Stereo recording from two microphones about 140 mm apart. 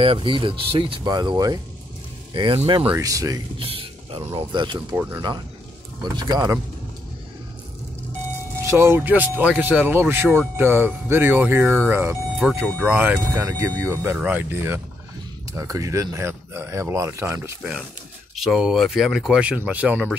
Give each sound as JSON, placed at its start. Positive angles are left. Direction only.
{"t": 0.0, "sound": "speech", "side_deg": -40}
{"t": 3.0, "sound": "speech", "side_deg": -25}
{"t": 3.5, "sound": "a sound", "side_deg": -40}
{"t": 4.3, "sound": "speech", "side_deg": -40}
{"t": 4.7, "sound": "speech", "side_deg": -15}
{"t": 6.0, "sound": "speech", "side_deg": -30}
{"t": 8.6, "sound": "speech", "side_deg": -20}
{"t": 17.6, "sound": "speech", "side_deg": -5}